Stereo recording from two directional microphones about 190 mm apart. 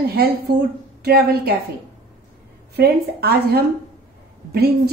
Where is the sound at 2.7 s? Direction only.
55° right (ahead or behind).